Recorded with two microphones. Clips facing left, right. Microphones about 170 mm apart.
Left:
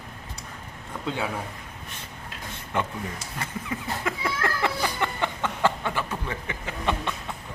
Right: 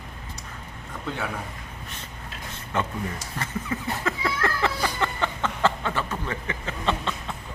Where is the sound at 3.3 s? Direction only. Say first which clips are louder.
Right 3 dB; 10° left (ahead or behind).